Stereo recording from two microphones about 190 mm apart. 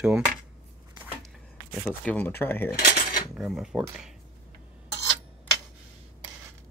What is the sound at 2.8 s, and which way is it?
Cutlery, 50° left (ahead or behind).